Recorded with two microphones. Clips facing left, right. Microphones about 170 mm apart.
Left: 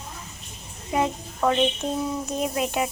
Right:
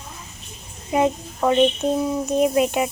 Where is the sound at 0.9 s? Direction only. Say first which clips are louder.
Right 5 dB; 20° right (ahead or behind).